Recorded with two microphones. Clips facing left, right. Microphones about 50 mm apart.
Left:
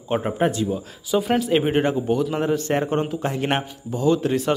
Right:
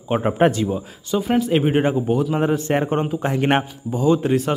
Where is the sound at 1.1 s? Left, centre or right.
Centre.